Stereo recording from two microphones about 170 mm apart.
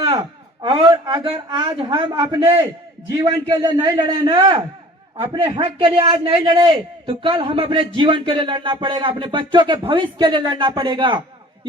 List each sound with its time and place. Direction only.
0.0 s a man's voice: 35° right (ahead or behind)
3.2 s speech: 25° right (ahead or behind)